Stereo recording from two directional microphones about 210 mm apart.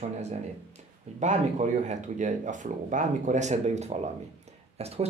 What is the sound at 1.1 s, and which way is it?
Speech, 35° right (ahead or behind).